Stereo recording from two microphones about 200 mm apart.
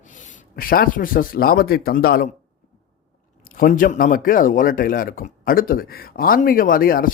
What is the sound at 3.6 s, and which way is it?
Speech, 45° left (ahead or behind).